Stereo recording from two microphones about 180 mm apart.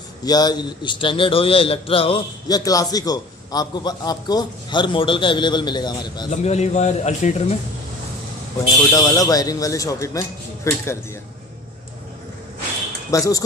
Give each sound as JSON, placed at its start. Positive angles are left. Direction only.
{"t": 0.2, "sound": "a man's voice", "side_deg": 20}
{"t": 6.3, "sound": "a man's voice", "side_deg": 40}
{"t": 8.6, "sound": "a man's voice", "side_deg": 20}
{"t": 13.1, "sound": "a man's voice", "side_deg": 20}